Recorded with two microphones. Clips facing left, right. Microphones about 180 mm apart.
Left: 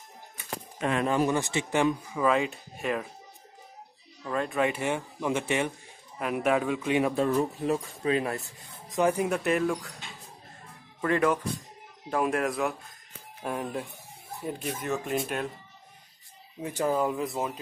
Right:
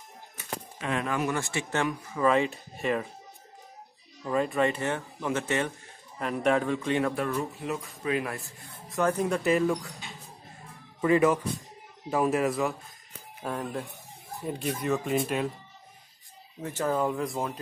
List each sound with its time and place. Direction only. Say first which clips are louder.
1.0 s speech: left 4 dB; 30° left (ahead or behind)
2.1 s speech: right 5 dB; centre (ahead or behind)
4.2 s speech: right 2 dB; 5° right (ahead or behind); by 7.2 s 10° left (ahead or behind)
7.3 s speech: left 5 dB; 30° left (ahead or behind)
8.8 s speech: left 1 dB; 15° left (ahead or behind); by 9.9 s centre (ahead or behind)
11.0 s speech: right 3 dB; 5° right (ahead or behind)
16.6 s speech: left 1 dB; 15° left (ahead or behind)